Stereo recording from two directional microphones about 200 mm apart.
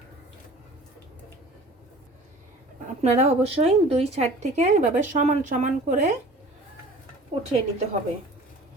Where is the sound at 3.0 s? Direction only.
30° right (ahead or behind).